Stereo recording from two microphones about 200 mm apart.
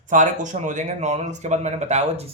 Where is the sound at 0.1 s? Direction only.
40° right (ahead or behind).